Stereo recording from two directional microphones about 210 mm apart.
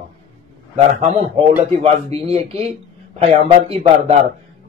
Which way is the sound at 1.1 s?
30° right (ahead or behind).